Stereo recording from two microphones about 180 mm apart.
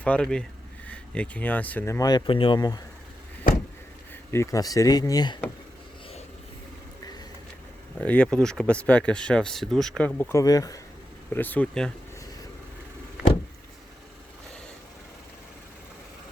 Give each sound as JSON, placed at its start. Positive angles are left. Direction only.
{"t": 0.0, "sound": "speech", "side_deg": 5}
{"t": 4.3, "sound": "speech", "side_deg": 15}
{"t": 7.9, "sound": "speech", "side_deg": 5}